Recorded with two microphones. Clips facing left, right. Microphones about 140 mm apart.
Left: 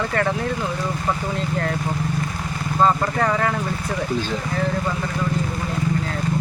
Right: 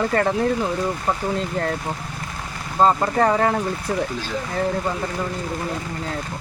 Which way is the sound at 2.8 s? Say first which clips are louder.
Right 2 dB; 30° right (ahead or behind).